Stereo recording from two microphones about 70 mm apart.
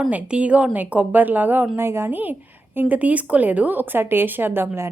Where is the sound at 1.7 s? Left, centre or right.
Right.